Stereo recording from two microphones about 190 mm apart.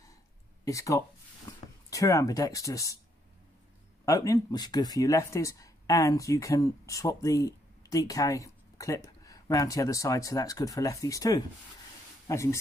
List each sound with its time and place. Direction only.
0.7 s speech: 15° left (ahead or behind)
4.0 s speech: 15° left (ahead or behind)